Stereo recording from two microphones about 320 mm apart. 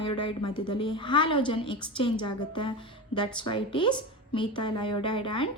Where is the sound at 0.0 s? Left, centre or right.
Centre.